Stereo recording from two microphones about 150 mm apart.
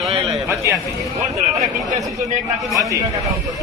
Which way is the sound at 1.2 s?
50° right (ahead or behind).